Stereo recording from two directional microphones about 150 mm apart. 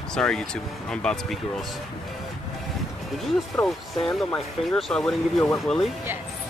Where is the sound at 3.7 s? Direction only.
5° left (ahead or behind).